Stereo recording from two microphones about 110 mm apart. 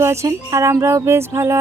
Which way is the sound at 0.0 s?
25° right (ahead or behind).